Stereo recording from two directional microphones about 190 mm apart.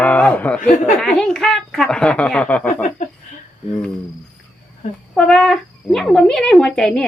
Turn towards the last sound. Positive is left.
turn(degrees=5)  # may be behind; listen again after turning